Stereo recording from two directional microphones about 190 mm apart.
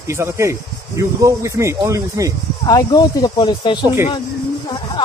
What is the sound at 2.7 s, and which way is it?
Speech, 20° left (ahead or behind).